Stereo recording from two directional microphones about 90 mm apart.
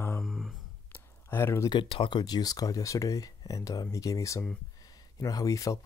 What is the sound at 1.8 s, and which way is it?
Speech, 80° left.